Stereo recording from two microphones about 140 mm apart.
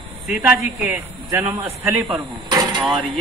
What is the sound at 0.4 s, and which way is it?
Speech, 15° right (ahead or behind).